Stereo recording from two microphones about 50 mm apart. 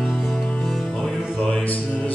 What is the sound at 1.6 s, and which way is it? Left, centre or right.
Mantra, left.